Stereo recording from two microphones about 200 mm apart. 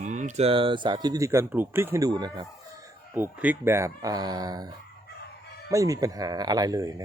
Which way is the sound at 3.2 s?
10° right (ahead or behind).